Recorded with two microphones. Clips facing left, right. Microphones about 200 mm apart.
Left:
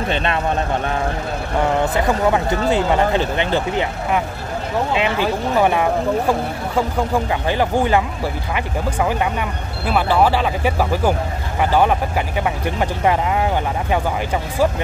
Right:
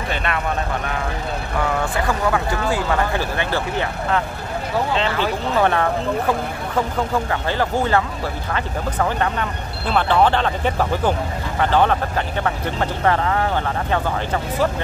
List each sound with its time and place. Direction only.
0.1 s speech: 25° left (ahead or behind)
1.6 s speech: 20° left (ahead or behind)